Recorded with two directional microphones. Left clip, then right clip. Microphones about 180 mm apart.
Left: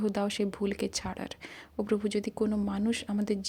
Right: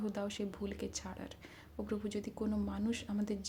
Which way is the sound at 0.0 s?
45° left (ahead or behind).